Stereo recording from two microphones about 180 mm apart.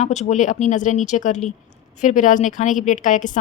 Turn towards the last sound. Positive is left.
turn(degrees=45)  # may be behind; listen again after turning